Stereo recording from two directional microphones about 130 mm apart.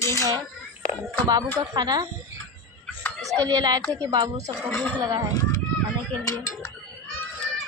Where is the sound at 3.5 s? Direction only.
30° right (ahead or behind).